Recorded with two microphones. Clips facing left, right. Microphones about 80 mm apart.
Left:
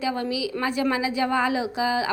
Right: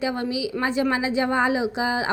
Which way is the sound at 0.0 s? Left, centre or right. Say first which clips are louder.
Right 1 dB; right.